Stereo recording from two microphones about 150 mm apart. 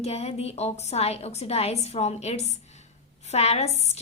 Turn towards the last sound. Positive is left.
turn(degrees=45)  # may be behind; listen again after turning